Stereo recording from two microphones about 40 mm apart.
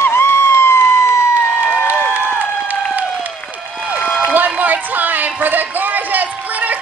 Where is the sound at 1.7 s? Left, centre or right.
Right.